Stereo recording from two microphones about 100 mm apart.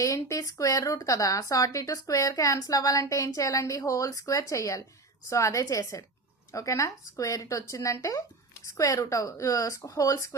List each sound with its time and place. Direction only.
0.0 s speech: 35° left (ahead or behind)